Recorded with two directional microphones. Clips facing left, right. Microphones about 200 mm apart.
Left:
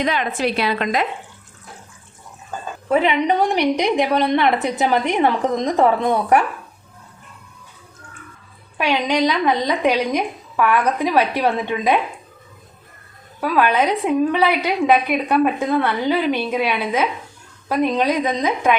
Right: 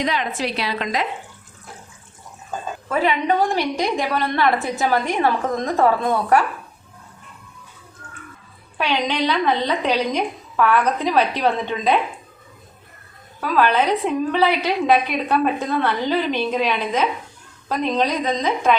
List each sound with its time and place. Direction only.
0.0 s a woman's voice: 55° left (ahead or behind)
2.9 s a woman's voice: 20° left (ahead or behind)
8.8 s a woman's voice: 10° left (ahead or behind)
13.4 s a woman's voice: 10° left (ahead or behind)